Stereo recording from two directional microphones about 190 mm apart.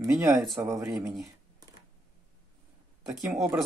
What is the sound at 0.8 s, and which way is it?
Speech, centre (ahead or behind).